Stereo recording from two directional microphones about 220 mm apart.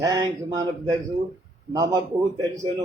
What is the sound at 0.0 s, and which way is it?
Speech, 20° right (ahead or behind).